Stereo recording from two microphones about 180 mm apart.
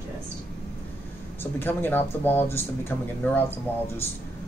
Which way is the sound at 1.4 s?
10° left (ahead or behind).